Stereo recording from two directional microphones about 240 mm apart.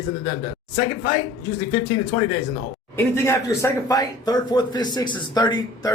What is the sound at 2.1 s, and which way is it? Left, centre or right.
Speech, left.